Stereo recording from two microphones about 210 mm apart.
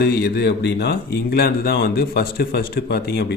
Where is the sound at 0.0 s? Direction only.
50° left (ahead or behind).